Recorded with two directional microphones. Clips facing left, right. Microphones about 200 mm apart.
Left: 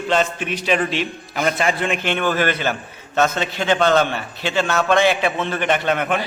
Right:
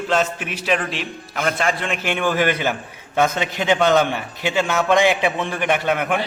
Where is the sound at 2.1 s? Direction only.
10° right (ahead or behind).